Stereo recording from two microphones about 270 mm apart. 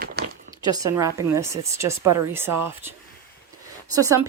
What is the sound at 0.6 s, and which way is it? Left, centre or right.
Speech, centre.